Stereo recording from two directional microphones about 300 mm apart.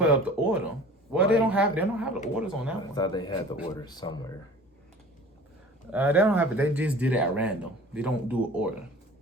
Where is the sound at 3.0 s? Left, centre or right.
Centre.